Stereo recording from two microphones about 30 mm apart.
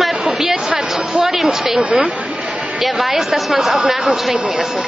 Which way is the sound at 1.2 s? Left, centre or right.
Centre.